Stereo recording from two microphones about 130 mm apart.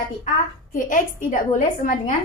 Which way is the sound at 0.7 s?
90° left.